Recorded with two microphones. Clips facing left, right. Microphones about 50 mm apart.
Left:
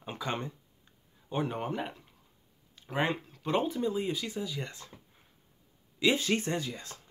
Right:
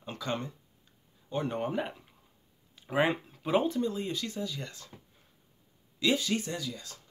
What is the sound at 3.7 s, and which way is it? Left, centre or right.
Speech, centre.